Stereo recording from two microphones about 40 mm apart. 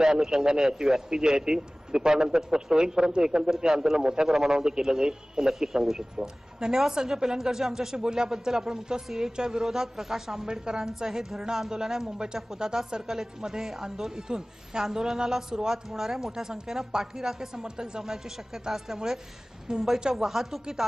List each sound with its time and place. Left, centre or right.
0.0 s a man's voice: centre
19.7 s a woman's voice: centre
20.2 s a man's voice: centre